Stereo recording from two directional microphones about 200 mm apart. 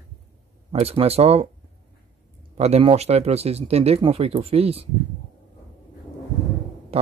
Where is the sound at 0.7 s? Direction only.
30° right (ahead or behind).